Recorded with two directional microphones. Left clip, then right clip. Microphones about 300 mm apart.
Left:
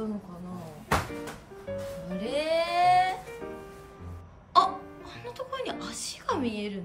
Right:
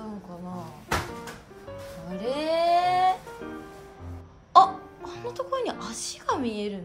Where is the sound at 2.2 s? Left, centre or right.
Centre.